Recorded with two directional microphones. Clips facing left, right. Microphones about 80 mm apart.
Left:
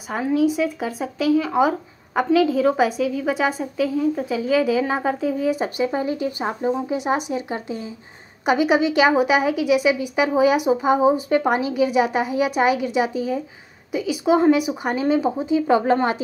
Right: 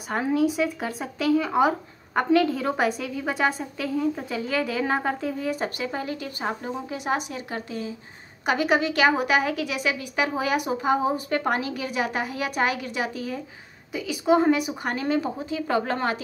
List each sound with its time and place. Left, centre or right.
0.3 s a woman's voice: centre; by 7.9 s left
8.5 s a woman's voice: centre